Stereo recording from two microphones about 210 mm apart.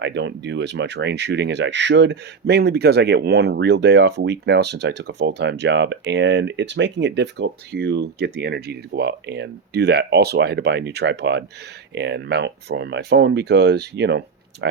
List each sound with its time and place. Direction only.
0.0 s speech: 55° right (ahead or behind)